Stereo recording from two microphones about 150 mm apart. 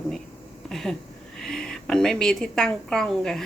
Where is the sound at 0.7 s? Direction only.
Centre (ahead or behind).